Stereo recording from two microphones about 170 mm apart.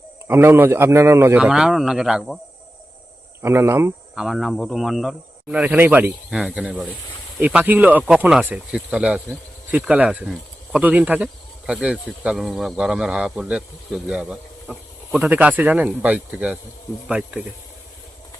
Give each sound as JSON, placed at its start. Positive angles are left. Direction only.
{"t": 0.3, "sound": "speech", "side_deg": -15}
{"t": 3.4, "sound": "speech", "side_deg": -15}
{"t": 4.1, "sound": "speech", "side_deg": -5}